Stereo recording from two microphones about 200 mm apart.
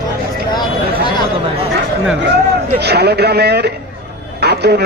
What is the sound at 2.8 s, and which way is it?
A man's voice, 55° right (ahead or behind).